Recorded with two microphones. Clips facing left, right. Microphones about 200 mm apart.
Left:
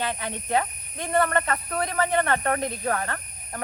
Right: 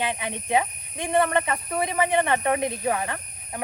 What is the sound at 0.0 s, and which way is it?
Speech, 15° right (ahead or behind).